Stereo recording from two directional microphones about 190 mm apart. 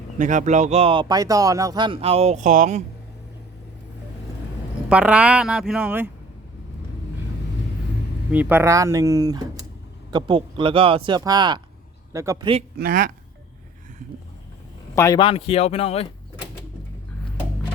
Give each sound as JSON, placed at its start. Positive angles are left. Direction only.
{"t": 0.2, "sound": "speech", "side_deg": -40}
{"t": 4.9, "sound": "speech", "side_deg": -5}
{"t": 8.3, "sound": "speech", "side_deg": -10}
{"t": 12.7, "sound": "speech", "side_deg": -50}
{"t": 14.9, "sound": "speech", "side_deg": 15}
{"t": 15.2, "sound": "speech", "side_deg": 30}